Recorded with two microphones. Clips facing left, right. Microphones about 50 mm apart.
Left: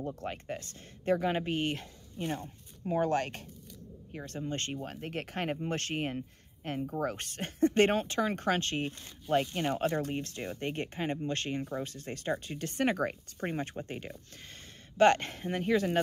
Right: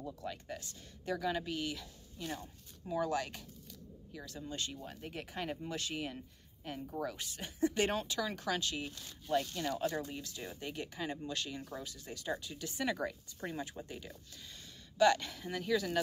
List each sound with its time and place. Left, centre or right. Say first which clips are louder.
0.0 s speech: left 6 dB; left